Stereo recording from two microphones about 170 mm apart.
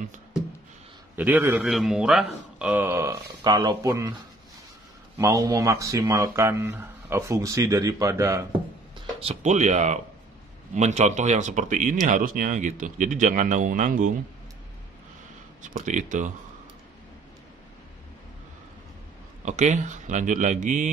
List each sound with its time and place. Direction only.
1.1 s a man's voice: 10° right (ahead or behind)
5.1 s speech: 20° right (ahead or behind)
9.2 s speech: 40° right (ahead or behind)
15.6 s speech: 45° right (ahead or behind)
19.4 s speech: 45° right (ahead or behind)